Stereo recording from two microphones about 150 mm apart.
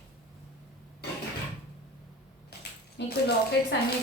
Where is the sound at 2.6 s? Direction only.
90° left.